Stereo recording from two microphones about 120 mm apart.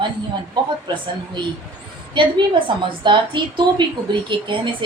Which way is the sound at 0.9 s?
40° right (ahead or behind).